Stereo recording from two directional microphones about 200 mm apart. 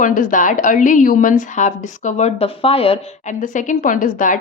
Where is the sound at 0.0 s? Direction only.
40° left (ahead or behind).